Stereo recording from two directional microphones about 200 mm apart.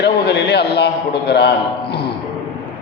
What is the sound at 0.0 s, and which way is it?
A man's voice, 55° left (ahead or behind).